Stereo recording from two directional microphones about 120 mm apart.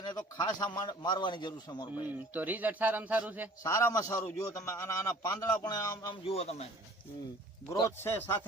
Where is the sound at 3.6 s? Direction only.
25° left (ahead or behind).